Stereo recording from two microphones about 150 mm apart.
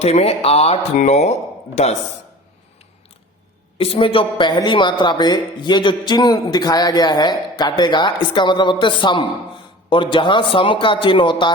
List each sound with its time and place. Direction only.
0.0 s speech: 45° left (ahead or behind)
3.8 s speech: 35° left (ahead or behind)